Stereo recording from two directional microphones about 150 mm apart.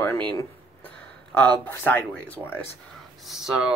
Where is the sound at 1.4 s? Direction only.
10° left (ahead or behind).